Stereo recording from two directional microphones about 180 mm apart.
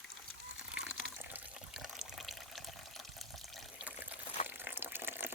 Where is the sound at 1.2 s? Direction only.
10° right (ahead or behind).